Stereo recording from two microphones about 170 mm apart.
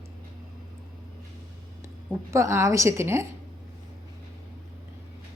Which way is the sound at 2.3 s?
15° right (ahead or behind).